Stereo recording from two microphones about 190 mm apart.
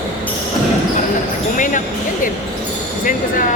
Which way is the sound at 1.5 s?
45° left (ahead or behind).